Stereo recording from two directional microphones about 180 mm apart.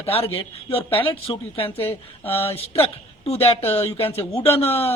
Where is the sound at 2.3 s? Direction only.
35° left (ahead or behind).